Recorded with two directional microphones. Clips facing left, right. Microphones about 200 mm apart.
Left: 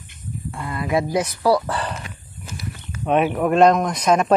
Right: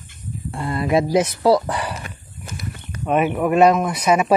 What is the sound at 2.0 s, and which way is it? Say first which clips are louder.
Horse: right 1 dB; 50° right (ahead or behind).